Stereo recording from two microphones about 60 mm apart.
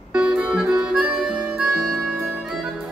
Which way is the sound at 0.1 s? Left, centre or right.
Centre.